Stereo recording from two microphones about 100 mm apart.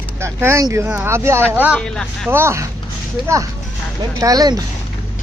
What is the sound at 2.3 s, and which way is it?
Speech, 25° right (ahead or behind).